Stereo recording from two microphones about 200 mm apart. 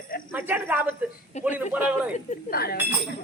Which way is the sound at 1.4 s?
10° right (ahead or behind).